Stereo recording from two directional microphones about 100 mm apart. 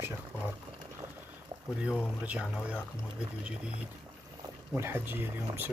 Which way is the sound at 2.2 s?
10° right (ahead or behind).